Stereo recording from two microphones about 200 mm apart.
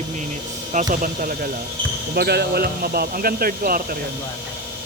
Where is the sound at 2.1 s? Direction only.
55° right (ahead or behind).